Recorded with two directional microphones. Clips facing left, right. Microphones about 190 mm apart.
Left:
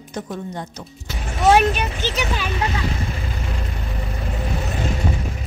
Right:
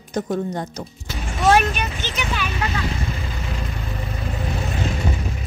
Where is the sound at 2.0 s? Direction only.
35° left (ahead or behind).